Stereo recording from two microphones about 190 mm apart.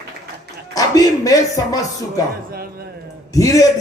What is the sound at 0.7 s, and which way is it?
Speech, 20° left (ahead or behind).